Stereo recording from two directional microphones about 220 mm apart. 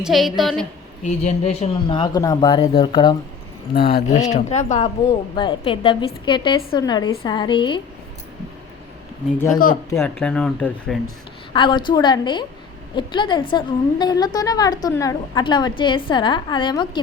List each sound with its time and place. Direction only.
0.0 s speech: centre (ahead or behind)
1.0 s a woman's voice: 30° left (ahead or behind)
3.8 s a woman's voice: 40° left (ahead or behind); by 7.8 s 20° left (ahead or behind)
9.9 s speech: 10° left (ahead or behind)
11.5 s a woman's voice: 20° left (ahead or behind)